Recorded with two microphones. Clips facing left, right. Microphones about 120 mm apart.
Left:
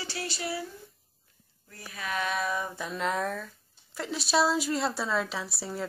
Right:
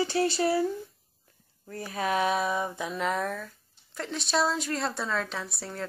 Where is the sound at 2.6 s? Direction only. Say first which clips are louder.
Right 3 dB; 15° right (ahead or behind).